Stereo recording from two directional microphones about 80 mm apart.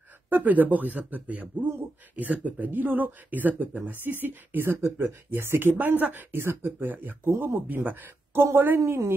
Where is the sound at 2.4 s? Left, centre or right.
Right.